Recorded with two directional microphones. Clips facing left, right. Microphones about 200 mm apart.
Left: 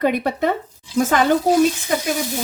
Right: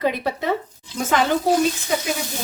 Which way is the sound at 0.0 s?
55° left (ahead or behind).